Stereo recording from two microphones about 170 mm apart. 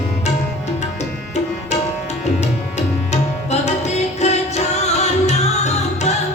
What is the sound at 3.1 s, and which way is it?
Tabla, 40° left (ahead or behind).